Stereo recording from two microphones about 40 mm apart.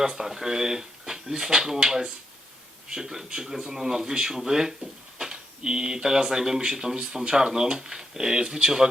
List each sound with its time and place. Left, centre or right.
0.0 s speech: centre